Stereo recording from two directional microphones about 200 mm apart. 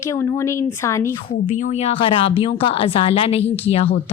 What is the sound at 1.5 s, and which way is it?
Speech, 40° left (ahead or behind).